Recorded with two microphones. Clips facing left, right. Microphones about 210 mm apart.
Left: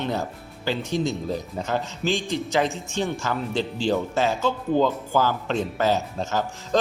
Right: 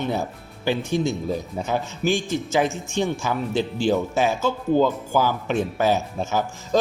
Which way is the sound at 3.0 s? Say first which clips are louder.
Right 2 dB; 10° right (ahead or behind).